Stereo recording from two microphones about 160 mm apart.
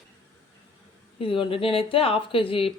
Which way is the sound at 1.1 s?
35° left (ahead or behind).